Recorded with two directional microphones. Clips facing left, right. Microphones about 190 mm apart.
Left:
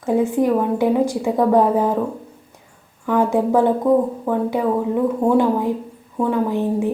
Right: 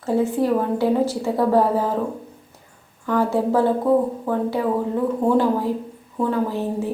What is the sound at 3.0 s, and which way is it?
A woman's voice, 20° left (ahead or behind).